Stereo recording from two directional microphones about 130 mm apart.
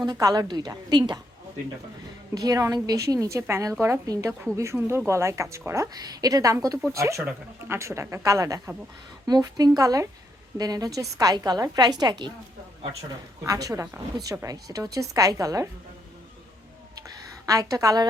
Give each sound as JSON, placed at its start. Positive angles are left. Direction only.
{"t": 0.0, "sound": "a woman's voice", "side_deg": -30}
{"t": 2.3, "sound": "speech", "side_deg": -25}
{"t": 17.4, "sound": "speech", "side_deg": -25}